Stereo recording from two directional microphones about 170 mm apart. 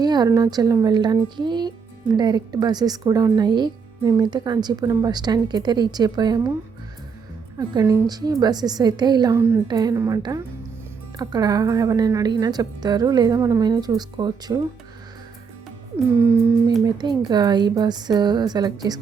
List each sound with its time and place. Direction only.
0.0 s speech: 25° right (ahead or behind)
7.6 s speech: 20° right (ahead or behind)
16.8 s speech: 25° right (ahead or behind)